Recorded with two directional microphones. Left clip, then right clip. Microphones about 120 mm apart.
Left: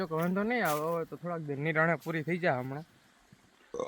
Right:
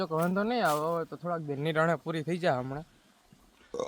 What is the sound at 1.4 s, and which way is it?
Speech, 30° right (ahead or behind).